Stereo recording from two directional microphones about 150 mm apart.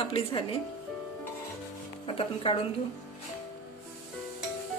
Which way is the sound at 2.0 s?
35° left (ahead or behind).